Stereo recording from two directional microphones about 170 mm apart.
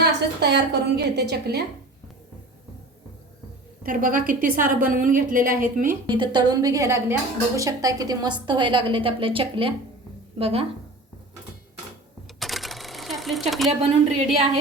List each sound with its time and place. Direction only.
0.0 s a woman's voice: 75° right (ahead or behind)
3.8 s a woman's voice: 55° right (ahead or behind)
6.1 s a woman's voice: 25° right (ahead or behind)
12.4 s typewriter: centre (ahead or behind)